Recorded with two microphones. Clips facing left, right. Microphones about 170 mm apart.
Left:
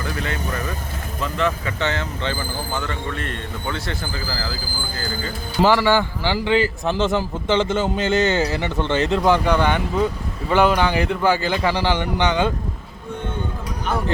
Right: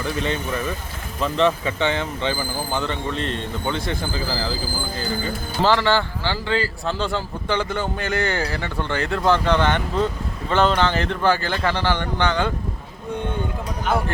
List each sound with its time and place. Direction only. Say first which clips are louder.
0.0 s speech: right 2 dB; 20° right (ahead or behind)
5.6 s a man's voice: left 2 dB; 15° left (ahead or behind)